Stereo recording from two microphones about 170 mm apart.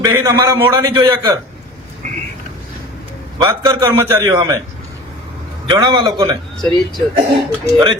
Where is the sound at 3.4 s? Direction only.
20° right (ahead or behind).